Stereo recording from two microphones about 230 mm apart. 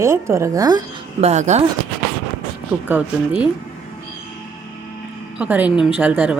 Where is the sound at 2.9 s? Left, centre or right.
Centre.